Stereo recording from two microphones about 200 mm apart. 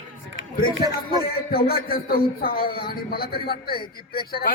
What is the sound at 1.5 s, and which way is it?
Speech, 50° left (ahead or behind).